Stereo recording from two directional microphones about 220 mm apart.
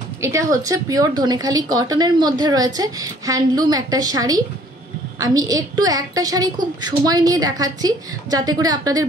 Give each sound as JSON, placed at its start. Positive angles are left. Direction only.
{"t": 0.2, "sound": "a woman's voice", "side_deg": -15}